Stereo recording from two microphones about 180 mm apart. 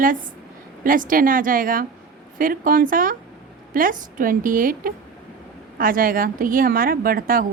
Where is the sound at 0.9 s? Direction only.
50° right (ahead or behind).